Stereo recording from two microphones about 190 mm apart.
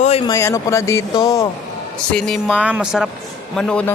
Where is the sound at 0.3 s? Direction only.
15° left (ahead or behind).